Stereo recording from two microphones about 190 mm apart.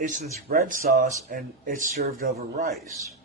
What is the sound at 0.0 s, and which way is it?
Speech, 40° right (ahead or behind).